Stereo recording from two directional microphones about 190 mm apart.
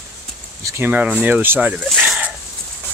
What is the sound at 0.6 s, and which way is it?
Speech, 15° right (ahead or behind).